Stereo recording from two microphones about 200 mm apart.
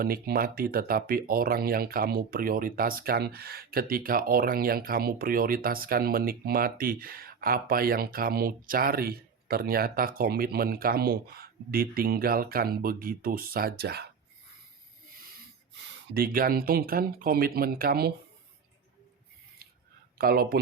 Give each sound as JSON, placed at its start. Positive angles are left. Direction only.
{"t": 0.0, "sound": "speech", "side_deg": -50}
{"t": 16.1, "sound": "speech", "side_deg": -45}
{"t": 20.1, "sound": "speech", "side_deg": -50}